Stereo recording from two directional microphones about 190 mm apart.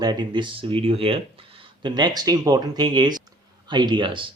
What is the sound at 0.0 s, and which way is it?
Speech, 25° right (ahead or behind).